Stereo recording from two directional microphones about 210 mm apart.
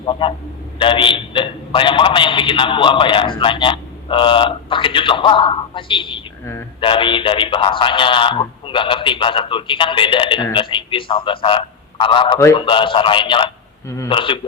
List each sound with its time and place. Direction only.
0.0 s a man's voice: 25° left (ahead or behind)
6.4 s a man's voice: 10° left (ahead or behind)
6.7 s a man's voice: 25° left (ahead or behind)